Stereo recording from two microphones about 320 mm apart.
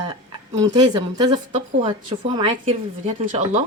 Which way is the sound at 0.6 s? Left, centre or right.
Centre.